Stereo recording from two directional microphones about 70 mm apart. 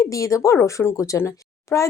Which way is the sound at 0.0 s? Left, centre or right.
Left.